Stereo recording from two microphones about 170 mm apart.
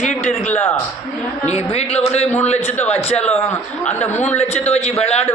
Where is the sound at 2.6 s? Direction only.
10° left (ahead or behind).